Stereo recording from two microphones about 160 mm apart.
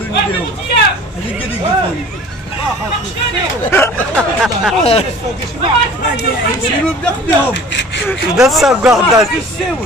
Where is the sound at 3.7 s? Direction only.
15° left (ahead or behind).